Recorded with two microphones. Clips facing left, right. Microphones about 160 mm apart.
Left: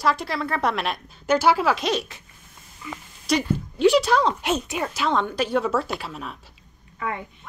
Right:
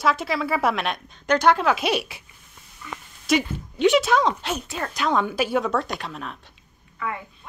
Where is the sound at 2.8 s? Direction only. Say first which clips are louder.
Left 1 dB; 10° left (ahead or behind).